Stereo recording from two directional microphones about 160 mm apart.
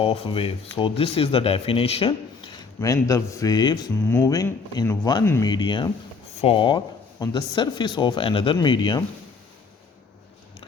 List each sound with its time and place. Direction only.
0.0 s speech: 35° left (ahead or behind)
2.8 s speech: 20° left (ahead or behind)
5.5 s speech: 30° left (ahead or behind)